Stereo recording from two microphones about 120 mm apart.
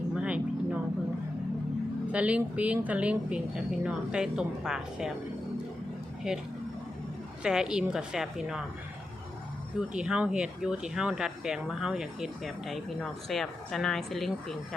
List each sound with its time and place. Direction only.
0.2 s a sound: 10° right (ahead or behind)
2.1 s a woman's voice: 10° right (ahead or behind)
6.3 s speech: 5° right (ahead or behind)
7.4 s speech: 5° right (ahead or behind)
9.9 s speech: 5° right (ahead or behind)